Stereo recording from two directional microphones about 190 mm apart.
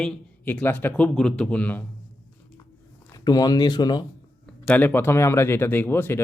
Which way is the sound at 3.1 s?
20° left (ahead or behind).